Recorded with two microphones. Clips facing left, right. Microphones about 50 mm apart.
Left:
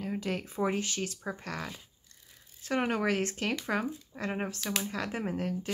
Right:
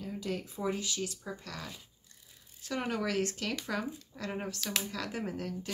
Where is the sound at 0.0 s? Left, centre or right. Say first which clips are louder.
Left 3 dB; left.